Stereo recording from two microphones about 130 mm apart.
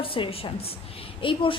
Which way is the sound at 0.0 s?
45° left (ahead or behind).